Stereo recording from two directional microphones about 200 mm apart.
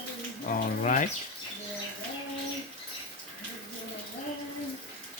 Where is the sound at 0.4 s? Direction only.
40° left (ahead or behind).